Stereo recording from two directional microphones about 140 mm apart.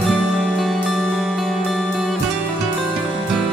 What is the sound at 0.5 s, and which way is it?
Music, centre (ahead or behind).